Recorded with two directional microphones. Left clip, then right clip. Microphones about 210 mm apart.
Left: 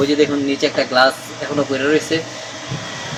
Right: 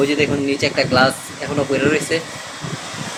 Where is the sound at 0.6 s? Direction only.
5° right (ahead or behind).